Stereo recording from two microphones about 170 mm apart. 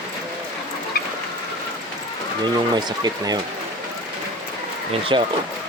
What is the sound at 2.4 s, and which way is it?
Speech, 25° right (ahead or behind).